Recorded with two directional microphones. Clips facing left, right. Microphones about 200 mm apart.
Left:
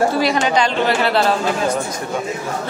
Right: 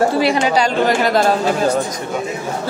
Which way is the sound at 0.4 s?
35° right (ahead or behind).